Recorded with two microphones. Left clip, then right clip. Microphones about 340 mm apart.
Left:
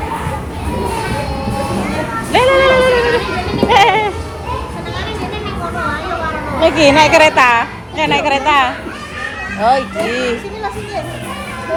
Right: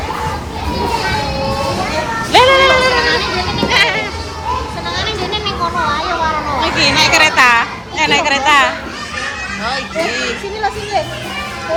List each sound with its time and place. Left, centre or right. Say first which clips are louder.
2.3 s a sound: right 1 dB; centre
3.7 s goat: left 5 dB; centre
6.6 s a woman's voice: left 5 dB; centre